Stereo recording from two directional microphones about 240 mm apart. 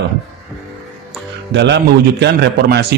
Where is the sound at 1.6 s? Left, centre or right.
Right.